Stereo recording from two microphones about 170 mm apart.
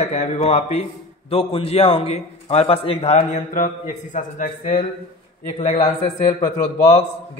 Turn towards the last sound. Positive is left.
turn(degrees=35)  # may be behind; listen again after turning